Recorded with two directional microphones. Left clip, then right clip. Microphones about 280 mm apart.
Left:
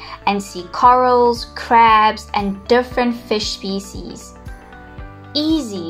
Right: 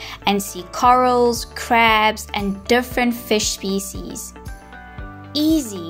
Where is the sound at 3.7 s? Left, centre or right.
Right.